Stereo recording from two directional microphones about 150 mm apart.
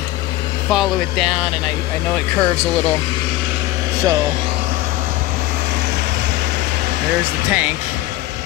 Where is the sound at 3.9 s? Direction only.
20° right (ahead or behind).